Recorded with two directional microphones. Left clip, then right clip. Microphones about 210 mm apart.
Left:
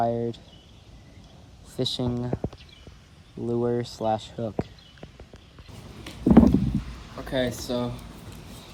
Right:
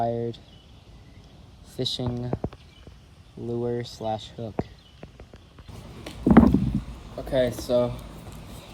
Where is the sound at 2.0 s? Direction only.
15° left (ahead or behind).